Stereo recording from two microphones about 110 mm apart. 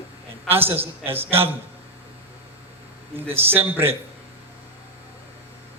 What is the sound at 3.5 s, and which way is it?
Speech, 20° right (ahead or behind).